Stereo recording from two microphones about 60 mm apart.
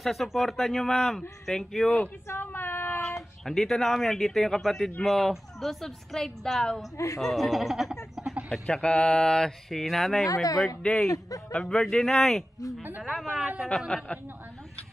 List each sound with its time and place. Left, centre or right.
0.0 s a woman's voice: centre
2.2 s a sound: left
3.4 s a woman's voice: centre
8.6 s speech: centre
10.2 s speech: left
10.8 s speech: centre
11.1 s speech: left
11.6 s a woman's voice: centre
13.3 s speech: centre
13.7 s a woman's voice: centre